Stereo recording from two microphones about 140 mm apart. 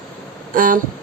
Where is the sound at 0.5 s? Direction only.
80° right.